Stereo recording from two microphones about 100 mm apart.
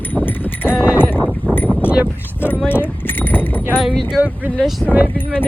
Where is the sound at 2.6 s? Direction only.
20° left (ahead or behind).